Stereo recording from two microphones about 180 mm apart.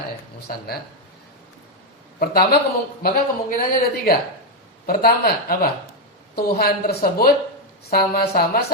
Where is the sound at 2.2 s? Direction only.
55° left (ahead or behind).